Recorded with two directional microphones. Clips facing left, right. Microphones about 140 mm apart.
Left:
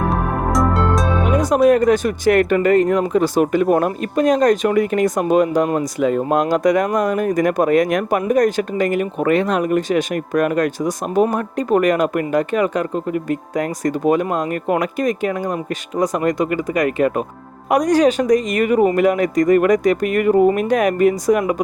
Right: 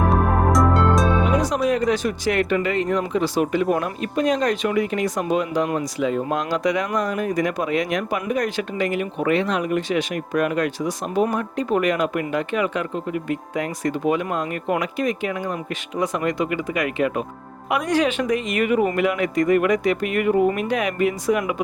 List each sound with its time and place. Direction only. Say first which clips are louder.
0.1 s music: right 1 dB; centre (ahead or behind)
1.3 s music: left 3 dB; 50° left (ahead or behind)
1.7 s speech: left 6 dB; 55° left (ahead or behind)